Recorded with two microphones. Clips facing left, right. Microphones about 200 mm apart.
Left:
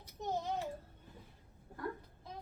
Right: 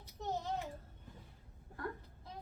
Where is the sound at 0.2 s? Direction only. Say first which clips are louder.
Left 2 dB; 15° left (ahead or behind).